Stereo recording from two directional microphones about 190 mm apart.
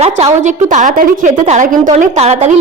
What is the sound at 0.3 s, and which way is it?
A woman's voice, 40° right (ahead or behind).